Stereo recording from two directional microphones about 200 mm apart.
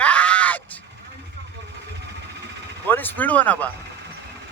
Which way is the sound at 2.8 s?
10° left (ahead or behind).